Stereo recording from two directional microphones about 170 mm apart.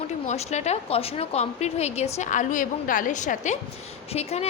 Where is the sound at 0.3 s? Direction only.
40° left (ahead or behind).